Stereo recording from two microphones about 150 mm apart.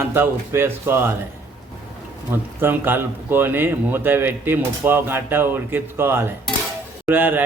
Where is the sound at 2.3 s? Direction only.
15° right (ahead or behind).